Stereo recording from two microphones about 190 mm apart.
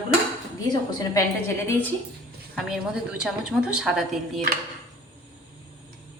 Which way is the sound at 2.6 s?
5° right (ahead or behind).